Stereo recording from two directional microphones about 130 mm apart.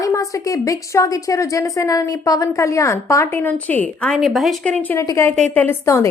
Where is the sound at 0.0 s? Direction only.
25° left (ahead or behind).